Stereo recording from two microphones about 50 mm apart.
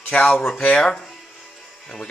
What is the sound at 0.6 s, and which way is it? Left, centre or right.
Speech, left.